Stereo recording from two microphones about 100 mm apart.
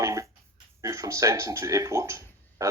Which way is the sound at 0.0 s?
30° right (ahead or behind).